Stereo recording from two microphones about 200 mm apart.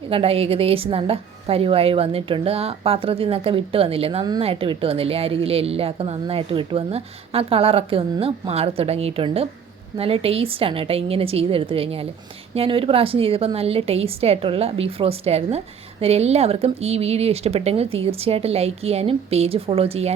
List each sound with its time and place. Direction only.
0.1 s a woman's voice: 30° right (ahead or behind)